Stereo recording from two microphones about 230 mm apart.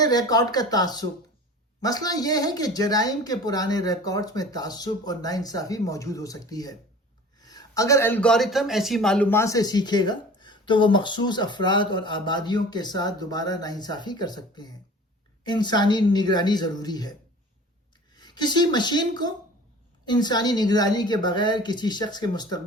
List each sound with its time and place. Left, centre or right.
0.0 s a man's voice: centre